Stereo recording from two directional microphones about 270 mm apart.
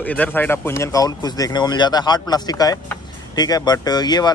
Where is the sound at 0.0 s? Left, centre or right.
Centre.